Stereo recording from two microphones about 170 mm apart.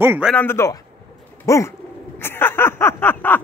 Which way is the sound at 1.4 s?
20° left (ahead or behind).